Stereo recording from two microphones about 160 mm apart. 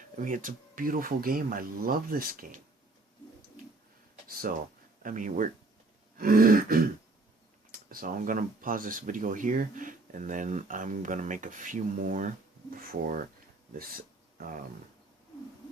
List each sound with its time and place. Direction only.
0.2 s speech: 55° right (ahead or behind)
4.3 s speech: 65° right (ahead or behind)
12.7 s speech: 65° right (ahead or behind)